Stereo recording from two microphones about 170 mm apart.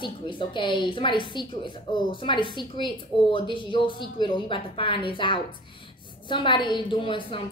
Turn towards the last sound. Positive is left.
turn(degrees=30)  # may be behind; listen again after turning